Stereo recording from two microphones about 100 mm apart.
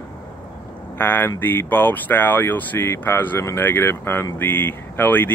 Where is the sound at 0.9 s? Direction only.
20° left (ahead or behind).